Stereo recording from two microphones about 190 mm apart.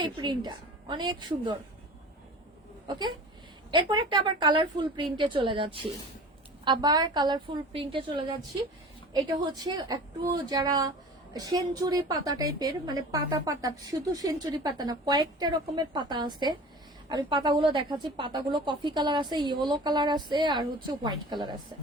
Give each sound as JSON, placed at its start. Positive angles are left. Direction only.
{"t": 0.0, "sound": "a woman's voice", "side_deg": -25}
{"t": 2.8, "sound": "a woman's voice", "side_deg": -20}